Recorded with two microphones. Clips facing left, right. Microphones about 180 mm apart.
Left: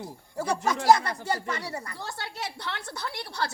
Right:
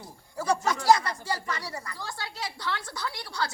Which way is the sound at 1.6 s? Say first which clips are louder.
Left 2 dB; 25° left (ahead or behind).